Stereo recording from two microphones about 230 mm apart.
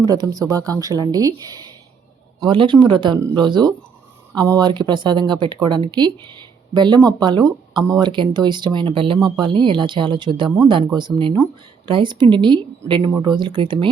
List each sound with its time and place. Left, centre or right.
0.0 s speech: centre